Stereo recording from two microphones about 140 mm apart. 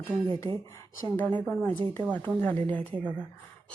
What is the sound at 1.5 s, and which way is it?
Speech, 15° left (ahead or behind).